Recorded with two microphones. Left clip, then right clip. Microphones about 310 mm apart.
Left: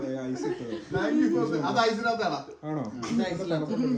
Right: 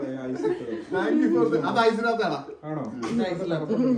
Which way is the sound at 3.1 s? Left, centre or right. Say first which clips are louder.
Right 2 dB; left.